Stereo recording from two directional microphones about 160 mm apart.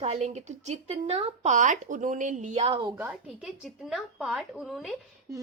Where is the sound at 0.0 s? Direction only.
45° right (ahead or behind).